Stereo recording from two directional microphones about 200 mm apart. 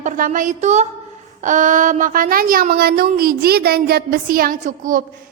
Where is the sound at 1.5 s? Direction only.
40° right (ahead or behind).